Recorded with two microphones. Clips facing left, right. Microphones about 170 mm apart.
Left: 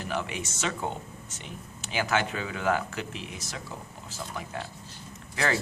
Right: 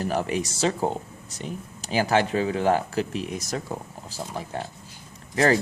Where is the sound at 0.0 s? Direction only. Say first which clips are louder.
Right 7 dB; 40° right (ahead or behind).